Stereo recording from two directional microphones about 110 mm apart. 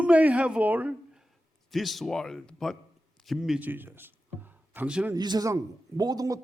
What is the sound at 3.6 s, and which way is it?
A man's voice, 20° right (ahead or behind).